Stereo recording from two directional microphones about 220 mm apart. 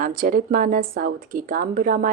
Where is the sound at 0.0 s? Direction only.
40° right (ahead or behind).